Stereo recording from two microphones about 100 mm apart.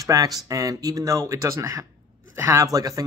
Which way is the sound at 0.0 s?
35° right (ahead or behind).